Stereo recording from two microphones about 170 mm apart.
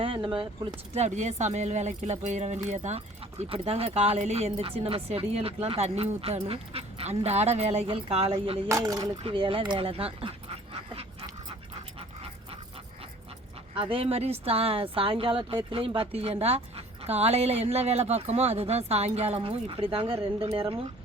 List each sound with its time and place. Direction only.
0.0 s speech: 30° right (ahead or behind)
0.9 s speech: 40° right (ahead or behind)
11.9 s dog: 35° right (ahead or behind)
13.7 s speech: 30° right (ahead or behind)